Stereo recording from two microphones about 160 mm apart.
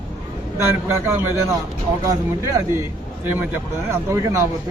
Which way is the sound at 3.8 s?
20° right (ahead or behind).